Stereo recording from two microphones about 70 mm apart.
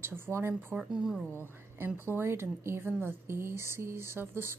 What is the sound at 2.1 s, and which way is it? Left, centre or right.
Speech, right.